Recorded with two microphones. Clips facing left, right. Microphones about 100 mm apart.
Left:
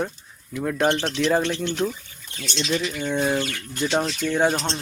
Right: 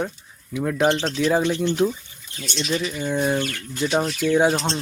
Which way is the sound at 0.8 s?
20° right (ahead or behind).